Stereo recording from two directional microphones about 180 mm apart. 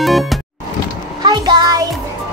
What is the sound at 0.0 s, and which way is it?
Music, centre (ahead or behind).